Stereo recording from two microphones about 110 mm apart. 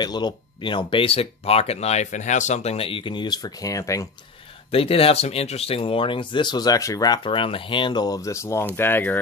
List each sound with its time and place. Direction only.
0.0 s speech: 40° left (ahead or behind)
4.6 s speech: 60° left (ahead or behind); by 7.2 s 30° left (ahead or behind)
7.2 s speech: 55° left (ahead or behind); by 9.2 s 15° left (ahead or behind)